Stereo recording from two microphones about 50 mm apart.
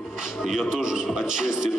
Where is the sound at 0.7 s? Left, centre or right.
Centre.